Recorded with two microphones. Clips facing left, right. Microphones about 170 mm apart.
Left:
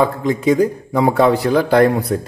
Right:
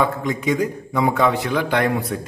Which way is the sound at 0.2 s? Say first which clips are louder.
Left 6 dB; 30° left (ahead or behind).